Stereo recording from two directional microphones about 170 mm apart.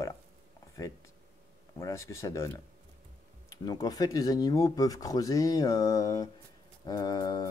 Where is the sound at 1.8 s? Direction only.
15° left (ahead or behind).